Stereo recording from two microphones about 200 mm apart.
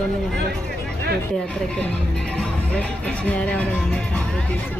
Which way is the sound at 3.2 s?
5° left (ahead or behind).